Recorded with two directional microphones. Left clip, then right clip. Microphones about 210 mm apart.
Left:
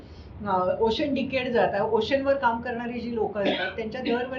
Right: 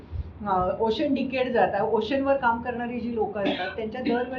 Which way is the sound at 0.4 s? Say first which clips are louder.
Even; 20° left (ahead or behind).